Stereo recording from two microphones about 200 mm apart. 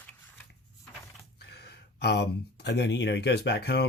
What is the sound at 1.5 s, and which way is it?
Speech, 55° left (ahead or behind).